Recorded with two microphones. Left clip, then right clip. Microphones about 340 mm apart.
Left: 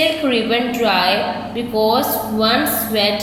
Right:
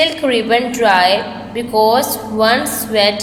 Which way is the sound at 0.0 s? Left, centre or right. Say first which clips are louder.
Right 2 dB; centre.